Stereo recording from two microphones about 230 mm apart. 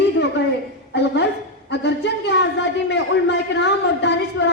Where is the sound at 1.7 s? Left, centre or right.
Left.